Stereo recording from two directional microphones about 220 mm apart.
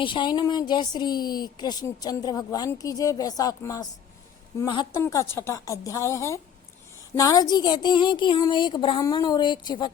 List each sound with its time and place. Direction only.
0.0 s a woman's voice: 20° left (ahead or behind)